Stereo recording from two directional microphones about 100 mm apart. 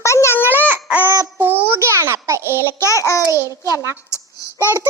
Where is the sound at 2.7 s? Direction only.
30° left (ahead or behind).